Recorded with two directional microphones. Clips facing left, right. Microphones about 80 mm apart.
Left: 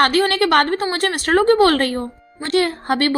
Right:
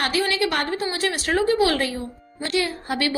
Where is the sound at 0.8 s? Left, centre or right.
Left.